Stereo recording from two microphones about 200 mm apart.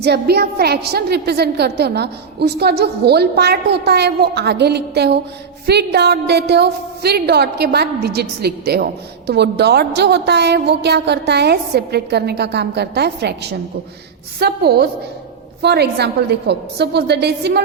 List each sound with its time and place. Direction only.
0.0 s a woman's voice: 55° right (ahead or behind)